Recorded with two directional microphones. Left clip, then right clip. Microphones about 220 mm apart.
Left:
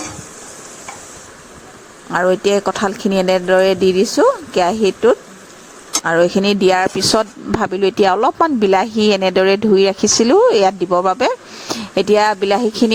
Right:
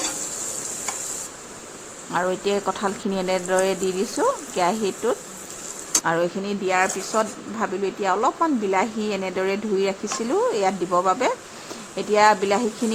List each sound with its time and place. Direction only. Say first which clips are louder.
2.1 s speech: left 9 dB; 30° left (ahead or behind)